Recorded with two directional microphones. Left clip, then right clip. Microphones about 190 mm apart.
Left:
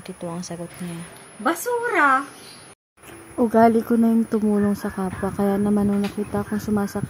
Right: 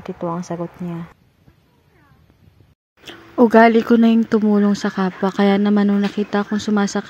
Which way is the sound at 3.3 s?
45° right (ahead or behind).